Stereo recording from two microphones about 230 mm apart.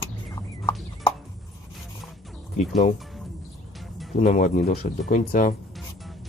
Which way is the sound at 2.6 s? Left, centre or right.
Left.